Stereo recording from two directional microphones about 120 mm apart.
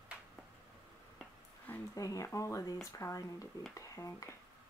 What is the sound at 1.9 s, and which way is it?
Speech, 25° left (ahead or behind).